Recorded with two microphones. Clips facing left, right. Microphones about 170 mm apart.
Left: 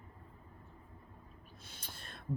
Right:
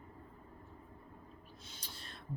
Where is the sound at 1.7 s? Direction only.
55° left (ahead or behind).